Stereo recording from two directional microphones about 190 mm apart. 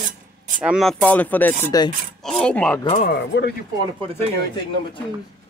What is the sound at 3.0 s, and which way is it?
Speech, 60° left (ahead or behind).